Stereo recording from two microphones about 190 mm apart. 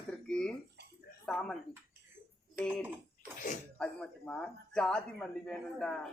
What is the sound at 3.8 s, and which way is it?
Speech, 5° left (ahead or behind).